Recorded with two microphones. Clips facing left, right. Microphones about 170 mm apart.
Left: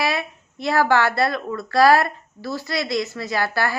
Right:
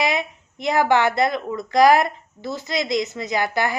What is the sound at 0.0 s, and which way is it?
Speech, 20° right (ahead or behind).